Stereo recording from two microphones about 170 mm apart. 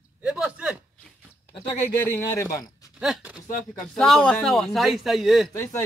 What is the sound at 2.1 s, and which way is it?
Speech, 15° left (ahead or behind).